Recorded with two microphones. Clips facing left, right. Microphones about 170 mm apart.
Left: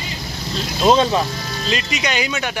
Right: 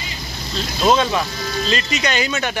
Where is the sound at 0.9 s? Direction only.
30° left (ahead or behind).